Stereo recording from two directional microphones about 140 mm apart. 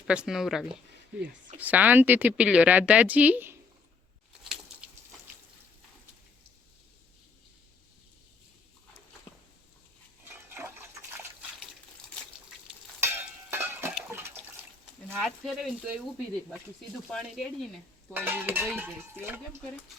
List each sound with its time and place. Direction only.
0.1 s speech: 5° right (ahead or behind)
13.0 s a sound: 15° right (ahead or behind)
15.2 s speech: centre (ahead or behind)
17.1 s speech: centre (ahead or behind)
18.1 s speech: 15° right (ahead or behind)